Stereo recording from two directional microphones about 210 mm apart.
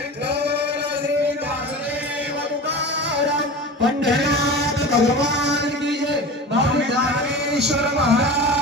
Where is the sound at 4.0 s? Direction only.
50° right (ahead or behind).